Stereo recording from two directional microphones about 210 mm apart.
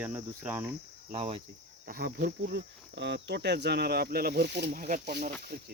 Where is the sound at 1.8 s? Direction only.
45° right (ahead or behind).